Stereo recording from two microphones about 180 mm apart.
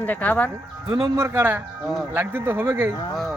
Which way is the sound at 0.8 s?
20° right (ahead or behind).